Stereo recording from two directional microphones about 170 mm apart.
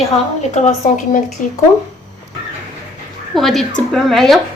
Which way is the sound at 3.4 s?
Centre (ahead or behind).